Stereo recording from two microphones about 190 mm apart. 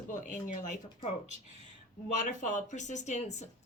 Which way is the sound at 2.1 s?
40° left (ahead or behind).